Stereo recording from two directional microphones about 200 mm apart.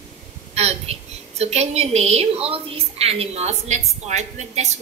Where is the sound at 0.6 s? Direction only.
30° right (ahead or behind).